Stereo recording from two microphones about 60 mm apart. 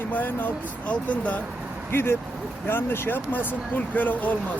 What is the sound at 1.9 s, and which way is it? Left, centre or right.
Speech, left.